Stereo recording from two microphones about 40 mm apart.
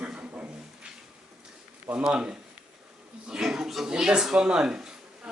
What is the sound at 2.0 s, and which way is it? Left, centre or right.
Speech, centre.